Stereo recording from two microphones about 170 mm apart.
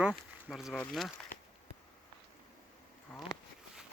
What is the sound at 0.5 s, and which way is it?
Speech, centre (ahead or behind).